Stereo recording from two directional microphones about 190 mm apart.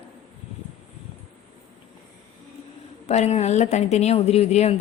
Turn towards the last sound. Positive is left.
turn(degrees=35)  # may be behind; listen again after turning